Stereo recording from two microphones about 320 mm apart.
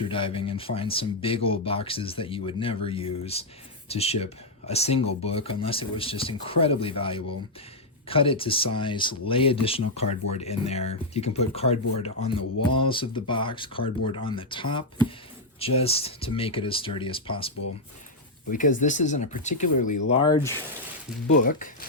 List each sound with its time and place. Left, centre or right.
0.1 s speech: centre
18.5 s speech: left
21.2 s speech: left